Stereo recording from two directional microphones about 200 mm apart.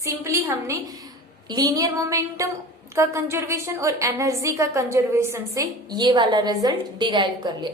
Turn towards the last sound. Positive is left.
turn(degrees=-20)  # may be behind; listen again after turning